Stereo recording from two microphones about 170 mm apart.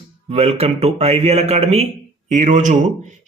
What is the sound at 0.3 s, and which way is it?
A man's voice, 35° right (ahead or behind).